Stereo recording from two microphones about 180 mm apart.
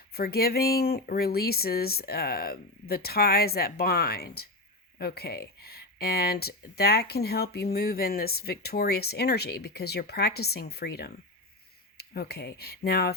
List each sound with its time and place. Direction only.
0.1 s speech: 60° left (ahead or behind)